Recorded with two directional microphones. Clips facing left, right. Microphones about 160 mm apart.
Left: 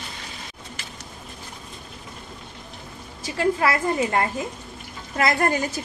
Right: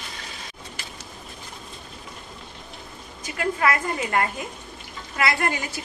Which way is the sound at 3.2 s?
30° left (ahead or behind).